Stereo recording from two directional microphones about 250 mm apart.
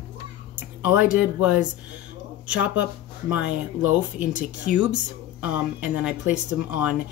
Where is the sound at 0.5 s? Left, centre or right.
Centre.